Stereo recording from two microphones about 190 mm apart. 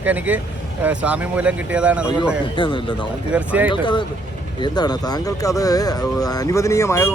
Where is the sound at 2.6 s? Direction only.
25° left (ahead or behind).